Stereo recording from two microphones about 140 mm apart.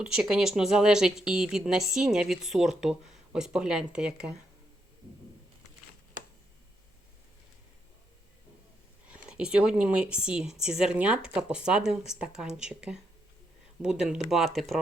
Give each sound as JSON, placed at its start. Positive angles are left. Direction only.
{"t": 0.0, "sound": "speech", "side_deg": -5}
{"t": 9.0, "sound": "speech", "side_deg": -10}